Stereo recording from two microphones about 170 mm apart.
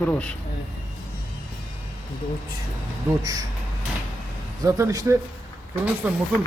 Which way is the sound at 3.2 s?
20° right (ahead or behind).